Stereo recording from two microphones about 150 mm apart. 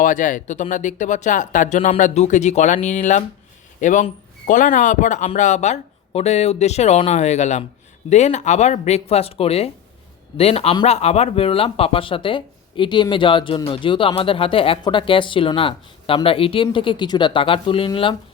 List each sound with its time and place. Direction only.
0.0 s a man's voice: 60° left (ahead or behind); by 18.2 s 35° left (ahead or behind)